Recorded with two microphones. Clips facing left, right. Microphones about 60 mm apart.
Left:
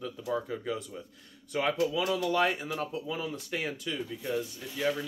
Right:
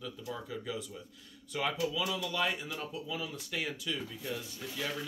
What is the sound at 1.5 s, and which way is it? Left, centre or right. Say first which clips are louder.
Speech: left 5 dB; left.